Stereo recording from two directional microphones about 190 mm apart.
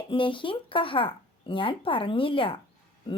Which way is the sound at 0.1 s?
25° left (ahead or behind).